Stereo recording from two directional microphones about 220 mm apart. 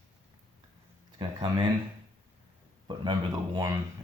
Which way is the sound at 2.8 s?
20° right (ahead or behind).